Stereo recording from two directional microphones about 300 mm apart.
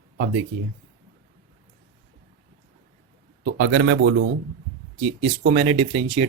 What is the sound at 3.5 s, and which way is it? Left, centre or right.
Speech, right.